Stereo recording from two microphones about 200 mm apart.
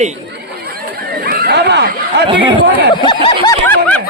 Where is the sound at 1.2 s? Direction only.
50° right (ahead or behind).